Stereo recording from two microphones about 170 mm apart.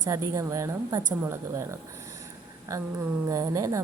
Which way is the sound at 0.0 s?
20° right (ahead or behind).